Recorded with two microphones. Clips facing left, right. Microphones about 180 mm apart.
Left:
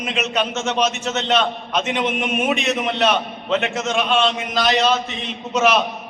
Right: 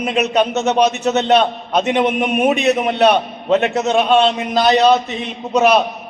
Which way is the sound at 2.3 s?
35° right (ahead or behind).